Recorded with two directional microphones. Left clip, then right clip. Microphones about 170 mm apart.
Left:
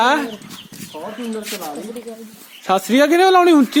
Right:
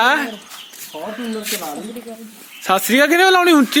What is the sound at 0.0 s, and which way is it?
Speech, 10° left (ahead or behind).